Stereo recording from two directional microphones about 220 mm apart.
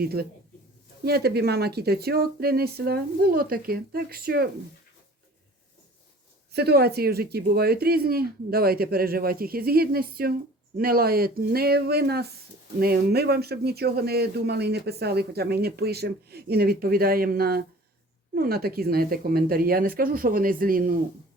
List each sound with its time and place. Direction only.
0.0 s speech: 45° right (ahead or behind)
6.5 s speech: 45° right (ahead or behind)